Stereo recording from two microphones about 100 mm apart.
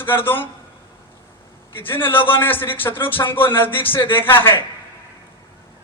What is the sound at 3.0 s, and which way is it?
Speech, 60° left (ahead or behind).